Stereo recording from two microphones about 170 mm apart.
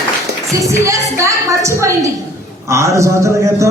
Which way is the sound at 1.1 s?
20° right (ahead or behind).